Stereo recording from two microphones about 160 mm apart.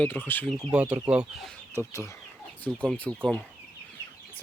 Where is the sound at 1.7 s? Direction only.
20° left (ahead or behind).